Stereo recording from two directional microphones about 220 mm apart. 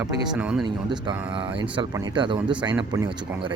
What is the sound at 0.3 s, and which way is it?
Speech, 5° right (ahead or behind).